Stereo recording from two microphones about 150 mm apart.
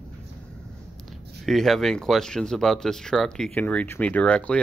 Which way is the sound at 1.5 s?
Centre (ahead or behind).